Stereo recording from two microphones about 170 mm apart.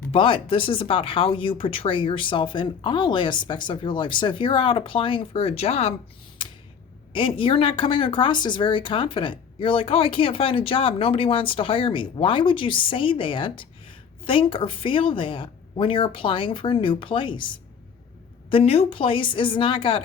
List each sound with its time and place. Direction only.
0.1 s speech: 30° left (ahead or behind)
7.1 s speech: 30° left (ahead or behind)